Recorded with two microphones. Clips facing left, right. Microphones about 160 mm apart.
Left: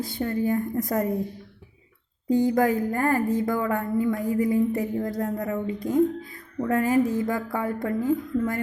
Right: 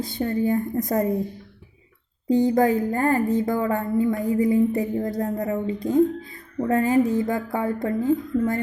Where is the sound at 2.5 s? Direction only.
20° right (ahead or behind).